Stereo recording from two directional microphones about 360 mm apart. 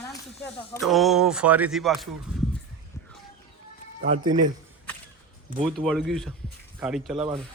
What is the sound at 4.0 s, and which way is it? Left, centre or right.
Speech, centre.